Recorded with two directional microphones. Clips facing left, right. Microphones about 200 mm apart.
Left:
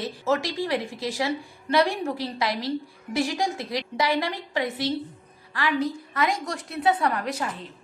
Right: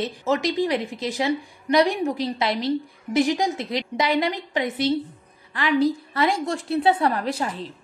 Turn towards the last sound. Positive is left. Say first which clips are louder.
# right 3 dB
turn(degrees=-30)  # may be behind; listen again after turning